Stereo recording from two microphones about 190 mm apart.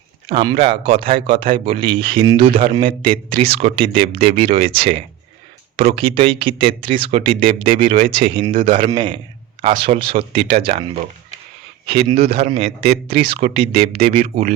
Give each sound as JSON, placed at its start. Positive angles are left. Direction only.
{"t": 0.3, "sound": "speech", "side_deg": -30}